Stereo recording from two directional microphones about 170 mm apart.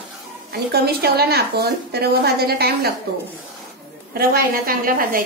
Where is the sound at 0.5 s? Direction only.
70° right (ahead or behind).